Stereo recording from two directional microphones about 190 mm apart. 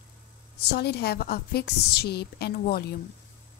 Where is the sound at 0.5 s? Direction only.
60° left (ahead or behind).